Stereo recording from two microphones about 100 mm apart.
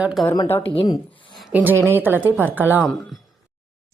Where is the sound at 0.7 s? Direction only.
45° left (ahead or behind).